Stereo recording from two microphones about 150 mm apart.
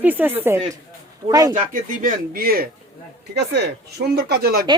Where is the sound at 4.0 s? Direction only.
90° right.